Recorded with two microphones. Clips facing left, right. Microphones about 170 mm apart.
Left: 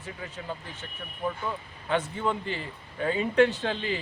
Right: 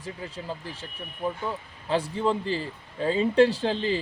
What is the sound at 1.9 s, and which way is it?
Speech, 30° right (ahead or behind).